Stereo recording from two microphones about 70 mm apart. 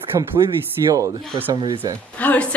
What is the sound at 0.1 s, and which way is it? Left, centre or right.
Speech, right.